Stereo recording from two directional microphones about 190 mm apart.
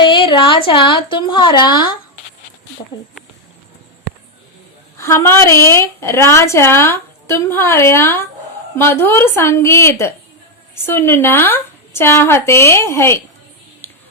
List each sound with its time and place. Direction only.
0.0 s a woman's voice: 25° left (ahead or behind)
4.9 s a woman's voice: 15° left (ahead or behind)